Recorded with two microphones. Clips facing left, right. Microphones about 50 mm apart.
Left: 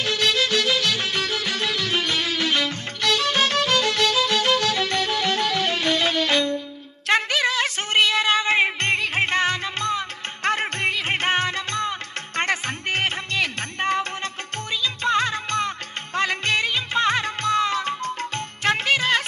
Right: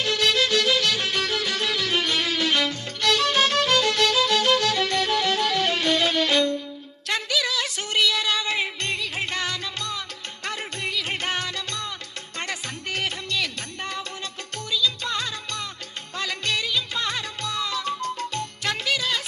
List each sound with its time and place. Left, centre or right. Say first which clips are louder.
0.0 s music: even; centre
7.1 s music: left 5 dB; left